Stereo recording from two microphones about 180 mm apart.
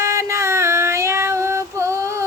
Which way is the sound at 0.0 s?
15° right (ahead or behind).